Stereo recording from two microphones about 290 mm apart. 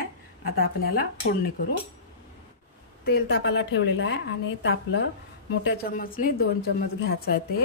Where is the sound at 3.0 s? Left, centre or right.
Left.